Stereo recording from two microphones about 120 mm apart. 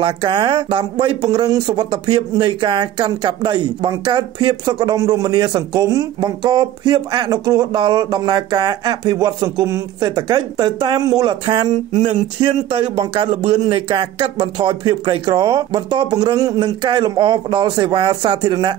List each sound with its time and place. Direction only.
0.0 s speech: 45° right (ahead or behind)
11.2 s speech: 45° right (ahead or behind)
16.3 s speech: 30° right (ahead or behind)
16.6 s speech: 40° right (ahead or behind)